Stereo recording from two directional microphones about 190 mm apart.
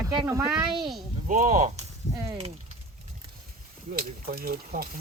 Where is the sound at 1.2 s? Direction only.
45° right (ahead or behind).